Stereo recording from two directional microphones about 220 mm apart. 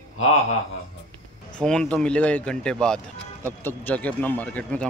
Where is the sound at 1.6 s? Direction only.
5° left (ahead or behind).